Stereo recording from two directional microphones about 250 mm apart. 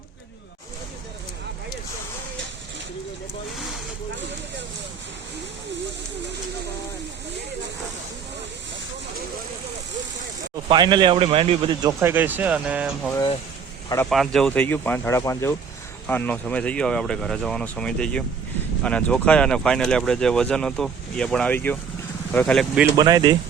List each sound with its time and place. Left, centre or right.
10.7 s a man's voice: centre
23.0 s a man's voice: centre